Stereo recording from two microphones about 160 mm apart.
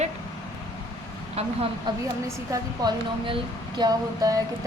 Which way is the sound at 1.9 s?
25° right (ahead or behind).